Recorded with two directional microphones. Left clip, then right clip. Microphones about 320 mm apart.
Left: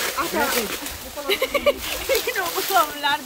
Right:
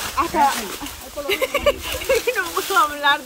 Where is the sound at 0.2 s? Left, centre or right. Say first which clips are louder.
Right 7 dB; centre.